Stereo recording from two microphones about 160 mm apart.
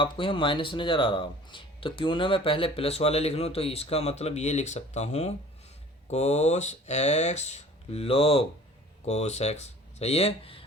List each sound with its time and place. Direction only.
0.0 s speech: 30° left (ahead or behind)